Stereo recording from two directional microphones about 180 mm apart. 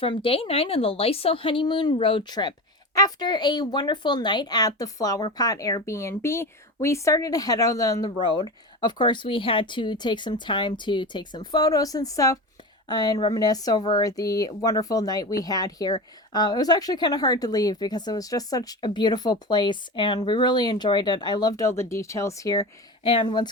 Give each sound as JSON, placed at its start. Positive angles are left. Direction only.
{"t": 0.0, "sound": "a woman's voice", "side_deg": 30}